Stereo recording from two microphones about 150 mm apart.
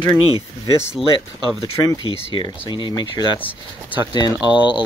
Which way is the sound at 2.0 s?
35° left (ahead or behind).